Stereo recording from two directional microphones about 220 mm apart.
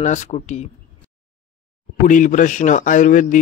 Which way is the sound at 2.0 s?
35° left (ahead or behind).